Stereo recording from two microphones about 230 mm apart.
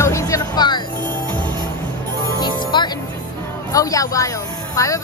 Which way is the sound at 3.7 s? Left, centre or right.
Centre.